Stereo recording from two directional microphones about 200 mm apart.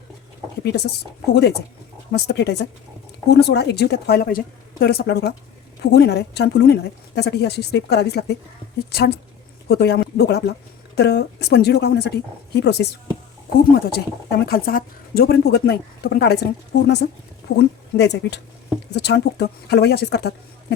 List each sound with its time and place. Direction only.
0.6 s speech: 50° left (ahead or behind)
2.1 s speech: 55° left (ahead or behind)